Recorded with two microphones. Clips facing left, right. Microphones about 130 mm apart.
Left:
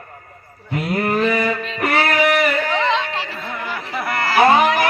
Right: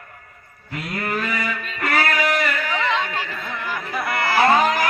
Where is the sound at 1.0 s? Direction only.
25° left (ahead or behind).